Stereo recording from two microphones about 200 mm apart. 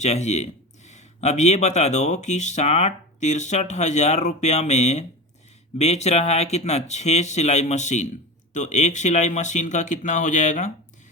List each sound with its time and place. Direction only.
0.0 s speech: 35° left (ahead or behind)